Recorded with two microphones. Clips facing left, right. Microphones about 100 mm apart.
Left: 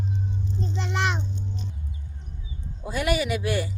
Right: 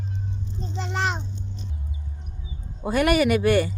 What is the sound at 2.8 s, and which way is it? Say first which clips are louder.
Speech: right 6 dB; 55° right (ahead or behind).